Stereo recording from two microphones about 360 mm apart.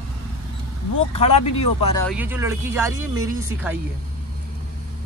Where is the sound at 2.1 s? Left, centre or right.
Centre.